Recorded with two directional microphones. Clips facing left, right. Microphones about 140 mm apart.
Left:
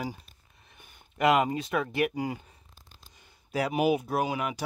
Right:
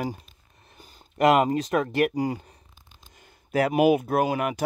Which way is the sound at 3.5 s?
55° right (ahead or behind).